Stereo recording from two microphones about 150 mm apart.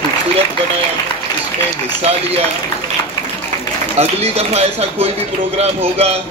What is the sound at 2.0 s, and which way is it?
Speech, 45° right (ahead or behind).